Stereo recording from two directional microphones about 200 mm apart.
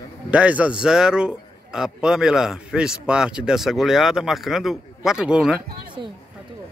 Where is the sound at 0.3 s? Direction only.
5° right (ahead or behind).